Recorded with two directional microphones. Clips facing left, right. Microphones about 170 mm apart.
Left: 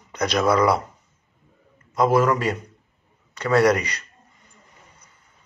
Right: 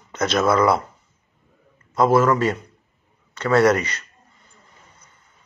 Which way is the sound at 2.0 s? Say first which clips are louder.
Right 2 dB; 15° left (ahead or behind).